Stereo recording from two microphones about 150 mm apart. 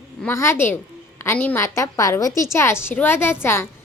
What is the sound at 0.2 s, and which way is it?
A woman's voice, 15° left (ahead or behind).